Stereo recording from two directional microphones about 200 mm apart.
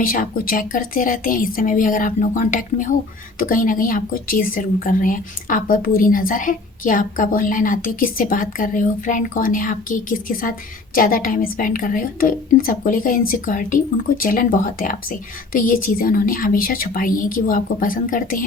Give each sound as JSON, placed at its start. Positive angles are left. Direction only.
{"t": 0.0, "sound": "a woman's voice", "side_deg": 45}